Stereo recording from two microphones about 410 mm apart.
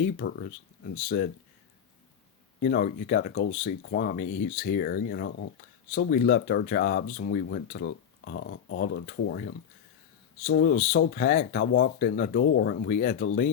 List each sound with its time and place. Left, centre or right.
0.0 s speech: left
2.6 s speech: left